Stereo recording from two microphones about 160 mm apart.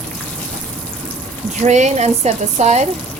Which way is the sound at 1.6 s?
45° right (ahead or behind).